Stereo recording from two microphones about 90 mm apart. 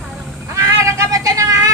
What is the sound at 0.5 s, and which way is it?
Cat, 35° right (ahead or behind).